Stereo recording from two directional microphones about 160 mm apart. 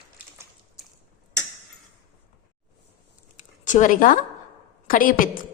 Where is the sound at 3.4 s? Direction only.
50° left (ahead or behind).